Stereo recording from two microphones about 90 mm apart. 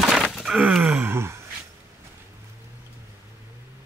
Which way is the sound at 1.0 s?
25° right (ahead or behind).